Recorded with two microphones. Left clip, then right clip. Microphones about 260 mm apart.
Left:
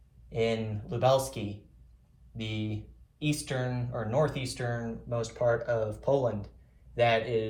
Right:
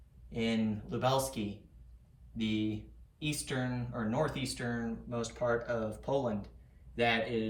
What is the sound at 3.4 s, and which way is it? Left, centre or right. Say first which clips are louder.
Speech: left 3 dB; left.